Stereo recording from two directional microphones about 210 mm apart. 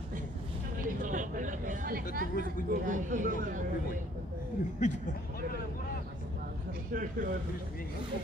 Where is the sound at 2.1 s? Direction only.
40° right (ahead or behind).